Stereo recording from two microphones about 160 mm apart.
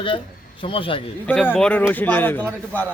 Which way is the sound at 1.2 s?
10° left (ahead or behind).